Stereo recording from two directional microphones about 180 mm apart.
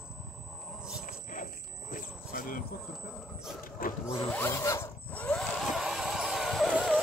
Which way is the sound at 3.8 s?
50° left (ahead or behind).